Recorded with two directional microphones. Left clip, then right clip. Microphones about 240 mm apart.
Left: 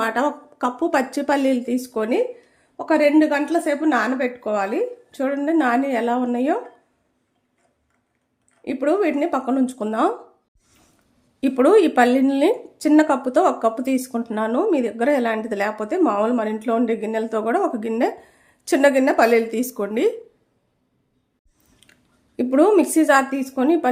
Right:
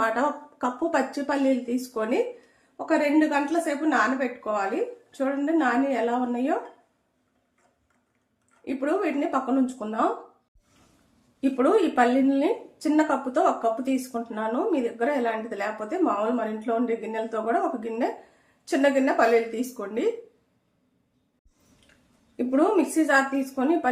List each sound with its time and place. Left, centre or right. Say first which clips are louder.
0.0 s a woman's voice: left 3 dB; left
8.6 s a woman's voice: left 6 dB; left
11.3 s speech: left 7 dB; left
22.4 s speech: left 6 dB; left